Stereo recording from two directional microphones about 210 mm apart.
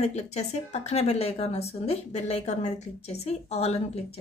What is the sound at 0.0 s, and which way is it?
A woman's voice, 30° left (ahead or behind).